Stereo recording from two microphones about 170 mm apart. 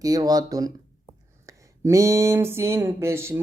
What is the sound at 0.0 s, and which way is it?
Speech, 20° right (ahead or behind).